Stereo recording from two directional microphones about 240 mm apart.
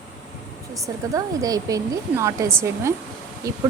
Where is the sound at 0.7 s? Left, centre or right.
Centre.